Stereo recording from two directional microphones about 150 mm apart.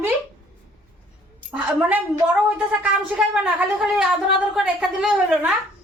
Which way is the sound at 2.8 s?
5° right (ahead or behind).